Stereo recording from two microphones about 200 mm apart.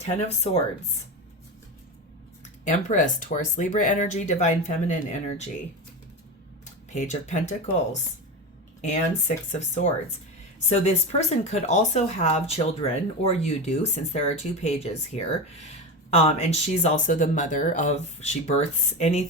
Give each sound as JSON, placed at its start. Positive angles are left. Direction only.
{"t": 0.0, "sound": "speech", "side_deg": 30}
{"t": 2.4, "sound": "speech", "side_deg": 40}
{"t": 6.9, "sound": "speech", "side_deg": 35}
{"t": 8.8, "sound": "speech", "side_deg": 35}